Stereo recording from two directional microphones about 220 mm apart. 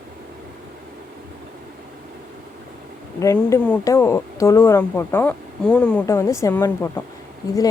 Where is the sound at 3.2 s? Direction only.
15° left (ahead or behind).